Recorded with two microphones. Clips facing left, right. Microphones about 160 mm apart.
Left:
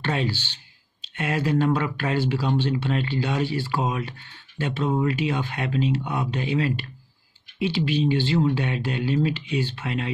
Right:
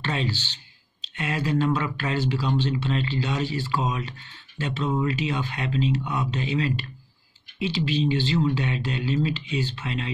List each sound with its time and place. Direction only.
0.0 s speech: 55° left (ahead or behind)